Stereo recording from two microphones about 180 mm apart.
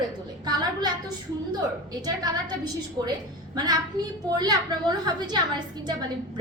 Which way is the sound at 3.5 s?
20° right (ahead or behind).